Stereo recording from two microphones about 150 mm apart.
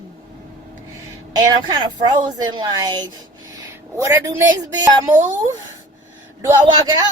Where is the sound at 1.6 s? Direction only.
30° right (ahead or behind).